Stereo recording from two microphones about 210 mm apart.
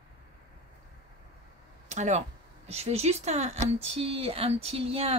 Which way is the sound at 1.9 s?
35° right (ahead or behind).